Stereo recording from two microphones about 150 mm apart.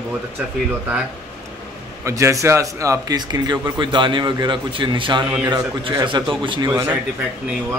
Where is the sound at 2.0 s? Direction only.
20° right (ahead or behind).